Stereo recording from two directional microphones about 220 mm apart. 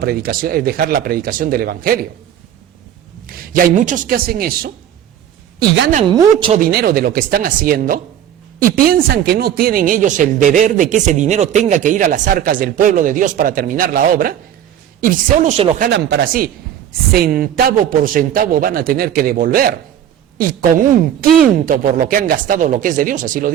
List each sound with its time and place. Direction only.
0.0 s speech: 45° right (ahead or behind)
3.2 s speech: 40° right (ahead or behind)
5.9 s a woman's voice: 30° right (ahead or behind)
6.6 s speech: 45° right (ahead or behind)
15.9 s speech: 50° right (ahead or behind)